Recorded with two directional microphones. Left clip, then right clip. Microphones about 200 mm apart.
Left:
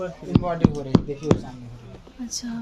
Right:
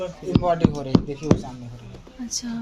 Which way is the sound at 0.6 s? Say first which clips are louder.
Even; 10° left (ahead or behind).